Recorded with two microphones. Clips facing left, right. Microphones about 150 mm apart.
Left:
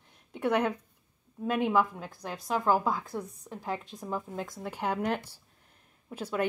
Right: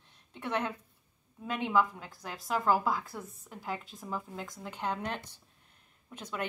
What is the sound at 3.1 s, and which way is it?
A woman's voice, 20° left (ahead or behind).